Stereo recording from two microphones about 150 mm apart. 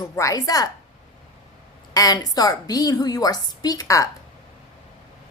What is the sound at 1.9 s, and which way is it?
A woman's voice, 25° left (ahead or behind).